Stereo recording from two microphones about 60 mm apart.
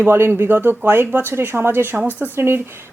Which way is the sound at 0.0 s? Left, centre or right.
Right.